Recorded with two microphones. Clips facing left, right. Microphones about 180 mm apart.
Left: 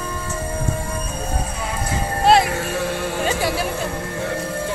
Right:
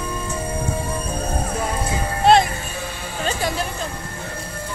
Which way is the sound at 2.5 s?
70° left (ahead or behind).